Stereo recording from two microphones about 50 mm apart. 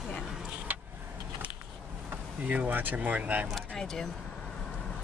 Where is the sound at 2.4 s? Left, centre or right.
Right.